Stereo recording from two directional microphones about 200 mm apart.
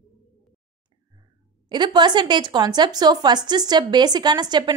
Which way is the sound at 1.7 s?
20° right (ahead or behind).